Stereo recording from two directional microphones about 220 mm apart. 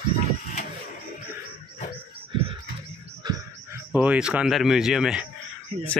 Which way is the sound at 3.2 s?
15° right (ahead or behind).